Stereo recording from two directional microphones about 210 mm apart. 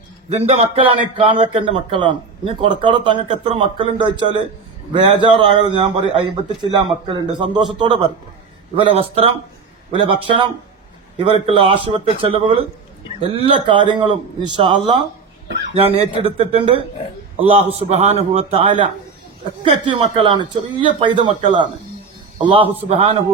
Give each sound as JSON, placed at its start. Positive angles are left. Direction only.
{"t": 0.3, "sound": "a man's voice", "side_deg": -30}